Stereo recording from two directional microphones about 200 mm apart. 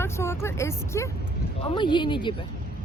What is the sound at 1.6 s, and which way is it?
Speech, 25° left (ahead or behind).